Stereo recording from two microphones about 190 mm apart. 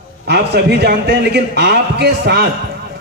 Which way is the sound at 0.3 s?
60° right (ahead or behind).